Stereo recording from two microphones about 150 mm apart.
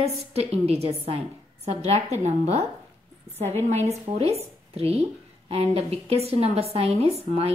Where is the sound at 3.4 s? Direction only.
15° left (ahead or behind).